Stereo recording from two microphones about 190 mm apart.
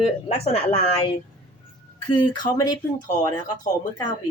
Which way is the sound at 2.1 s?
25° left (ahead or behind).